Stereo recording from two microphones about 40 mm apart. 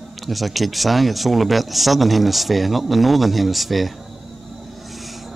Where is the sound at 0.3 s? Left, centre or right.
Centre.